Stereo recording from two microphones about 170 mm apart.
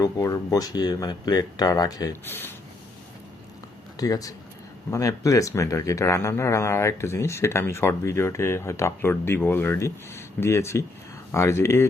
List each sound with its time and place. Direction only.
0.0 s speech: 20° left (ahead or behind)
3.9 s speech: 20° left (ahead or behind)